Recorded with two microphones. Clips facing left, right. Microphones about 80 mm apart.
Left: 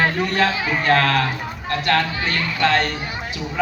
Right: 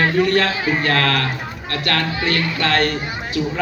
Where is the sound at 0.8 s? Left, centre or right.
Left.